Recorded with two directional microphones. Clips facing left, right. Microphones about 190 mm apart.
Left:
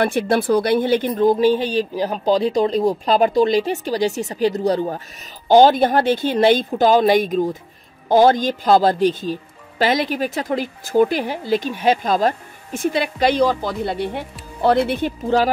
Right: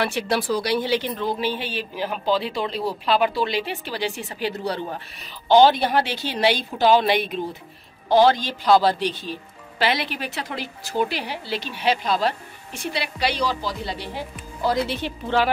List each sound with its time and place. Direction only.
0.0 s speech: 50° left (ahead or behind)